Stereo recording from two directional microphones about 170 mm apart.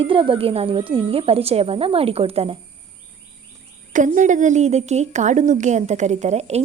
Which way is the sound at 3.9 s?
50° right (ahead or behind).